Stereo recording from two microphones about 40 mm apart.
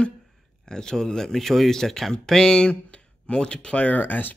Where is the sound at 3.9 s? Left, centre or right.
Left.